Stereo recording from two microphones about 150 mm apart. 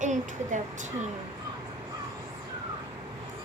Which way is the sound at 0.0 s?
55° right (ahead or behind).